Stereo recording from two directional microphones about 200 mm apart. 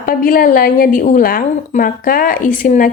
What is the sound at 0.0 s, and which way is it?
A woman's voice, 45° left (ahead or behind).